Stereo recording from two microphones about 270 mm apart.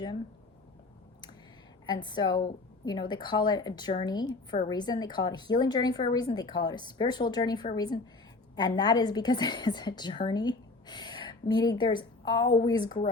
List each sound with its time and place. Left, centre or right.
1.9 s a woman's voice: centre